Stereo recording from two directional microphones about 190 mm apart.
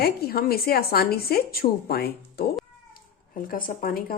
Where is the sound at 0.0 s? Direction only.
55° left (ahead or behind).